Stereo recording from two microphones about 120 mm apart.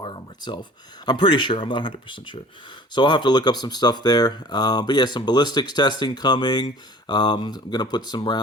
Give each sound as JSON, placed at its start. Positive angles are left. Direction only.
{"t": 0.0, "sound": "speech", "side_deg": 40}